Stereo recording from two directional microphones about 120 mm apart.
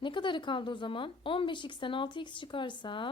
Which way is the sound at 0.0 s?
40° left (ahead or behind).